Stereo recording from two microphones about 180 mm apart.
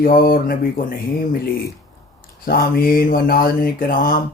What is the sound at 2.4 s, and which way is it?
Speech, 55° left (ahead or behind).